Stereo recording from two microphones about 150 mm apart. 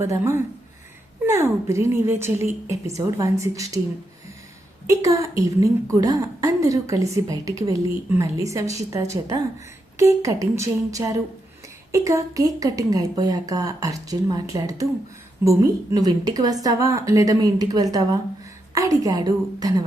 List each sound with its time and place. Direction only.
0.0 s speech: 20° right (ahead or behind)
4.9 s speech: 20° right (ahead or behind)